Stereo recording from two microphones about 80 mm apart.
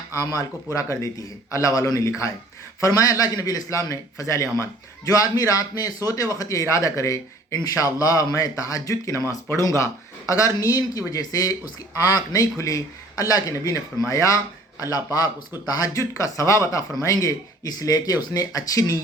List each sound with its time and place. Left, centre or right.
0.3 s a man's voice: left
5.1 s speech: left
14.8 s speech: left